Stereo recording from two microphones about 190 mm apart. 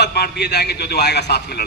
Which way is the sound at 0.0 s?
60° left (ahead or behind).